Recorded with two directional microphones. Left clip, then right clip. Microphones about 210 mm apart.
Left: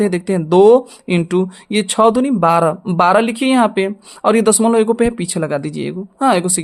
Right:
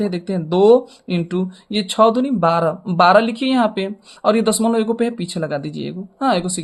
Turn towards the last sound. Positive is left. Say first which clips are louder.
# left 4 dB
turn(degrees=30)  # may be behind; listen again after turning